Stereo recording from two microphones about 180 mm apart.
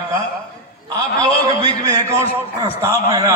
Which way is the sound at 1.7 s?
20° right (ahead or behind).